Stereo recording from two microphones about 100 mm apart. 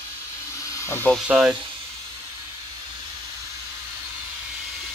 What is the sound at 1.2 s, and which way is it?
Speech, 10° right (ahead or behind).